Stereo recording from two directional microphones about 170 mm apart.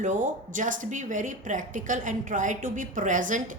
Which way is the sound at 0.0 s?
45° right (ahead or behind).